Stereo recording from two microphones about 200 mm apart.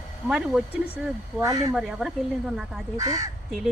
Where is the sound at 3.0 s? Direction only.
15° right (ahead or behind).